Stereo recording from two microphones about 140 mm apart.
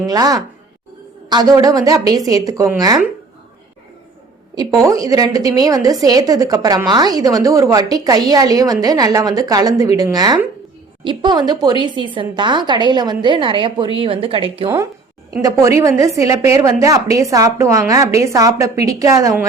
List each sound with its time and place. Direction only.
0.0 s a woman's voice: 25° right (ahead or behind)
4.5 s a woman's voice: 25° right (ahead or behind); by 14.7 s 40° right (ahead or behind)
15.4 s a woman's voice: 25° right (ahead or behind)